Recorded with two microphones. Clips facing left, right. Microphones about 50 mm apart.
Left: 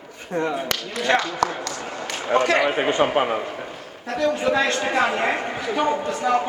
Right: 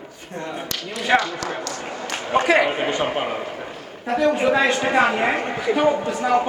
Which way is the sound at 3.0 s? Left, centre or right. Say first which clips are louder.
Left 3 dB; left.